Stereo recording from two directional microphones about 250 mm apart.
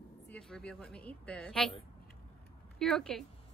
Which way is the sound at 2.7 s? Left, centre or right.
Centre.